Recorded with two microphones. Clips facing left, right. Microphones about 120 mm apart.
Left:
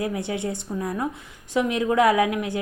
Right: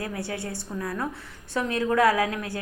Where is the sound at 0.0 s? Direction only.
20° left (ahead or behind).